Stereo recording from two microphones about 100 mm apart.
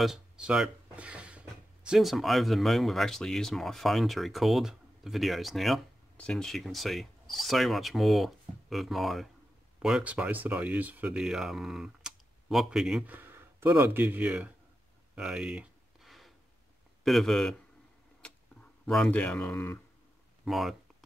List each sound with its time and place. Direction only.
0.0 s speech: 5° right (ahead or behind)
13.0 s speech: 20° right (ahead or behind)
15.1 s a sound: 10° right (ahead or behind)
17.0 s speech: centre (ahead or behind)
18.9 s speech: 10° left (ahead or behind)
20.4 s speech: centre (ahead or behind)